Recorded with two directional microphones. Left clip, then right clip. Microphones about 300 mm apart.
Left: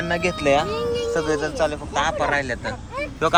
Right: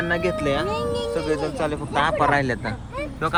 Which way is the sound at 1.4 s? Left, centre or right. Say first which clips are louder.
Left 2 dB; centre.